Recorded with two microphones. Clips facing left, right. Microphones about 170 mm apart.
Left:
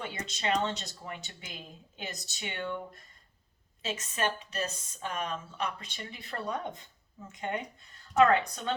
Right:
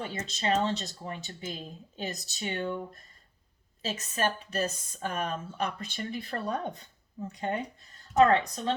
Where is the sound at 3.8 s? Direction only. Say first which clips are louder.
Right 2 dB; 40° right (ahead or behind).